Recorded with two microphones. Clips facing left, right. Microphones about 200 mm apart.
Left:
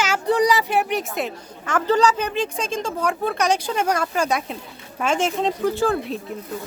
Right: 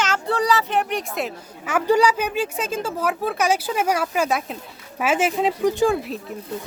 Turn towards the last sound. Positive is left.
turn(degrees=-15)  # may be behind; listen again after turning